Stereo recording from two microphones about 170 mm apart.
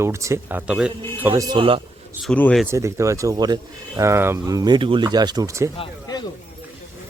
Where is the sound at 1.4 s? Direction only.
25° right (ahead or behind).